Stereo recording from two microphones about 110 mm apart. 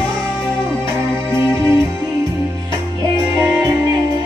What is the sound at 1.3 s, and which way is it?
Music, 25° right (ahead or behind).